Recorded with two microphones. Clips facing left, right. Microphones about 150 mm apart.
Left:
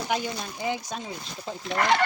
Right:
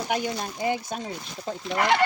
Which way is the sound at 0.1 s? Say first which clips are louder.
Right 2 dB; 50° right (ahead or behind).